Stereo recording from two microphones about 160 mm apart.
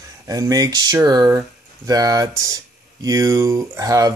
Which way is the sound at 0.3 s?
20° right (ahead or behind).